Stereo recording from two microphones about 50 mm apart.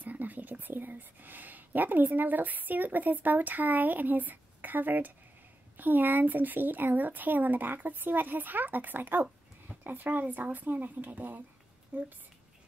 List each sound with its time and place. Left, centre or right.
0.0 s speech: right